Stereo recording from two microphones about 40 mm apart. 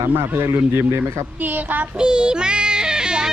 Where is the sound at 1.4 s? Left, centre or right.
Right.